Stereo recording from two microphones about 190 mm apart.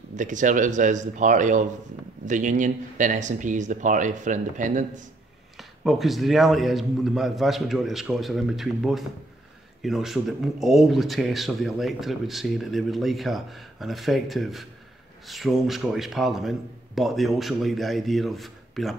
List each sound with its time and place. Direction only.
0.1 s speech: 40° right (ahead or behind)
5.6 s speech: centre (ahead or behind)